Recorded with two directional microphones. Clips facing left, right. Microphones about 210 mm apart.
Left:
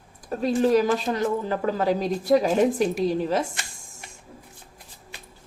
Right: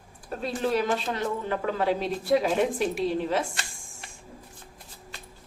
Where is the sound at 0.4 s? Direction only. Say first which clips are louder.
Left 7 dB; 40° left (ahead or behind).